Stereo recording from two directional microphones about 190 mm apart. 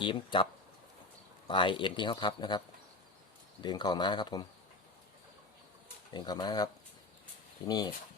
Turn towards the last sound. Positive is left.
turn(degrees=20)  # may be behind; listen again after turning